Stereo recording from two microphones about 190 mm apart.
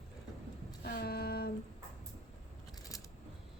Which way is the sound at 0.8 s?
55° left (ahead or behind).